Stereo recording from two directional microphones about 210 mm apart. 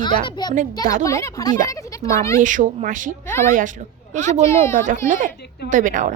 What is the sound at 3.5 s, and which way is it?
A woman's voice, 40° right (ahead or behind).